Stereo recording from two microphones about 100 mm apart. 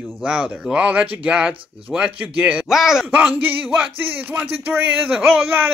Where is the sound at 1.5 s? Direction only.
65° right (ahead or behind).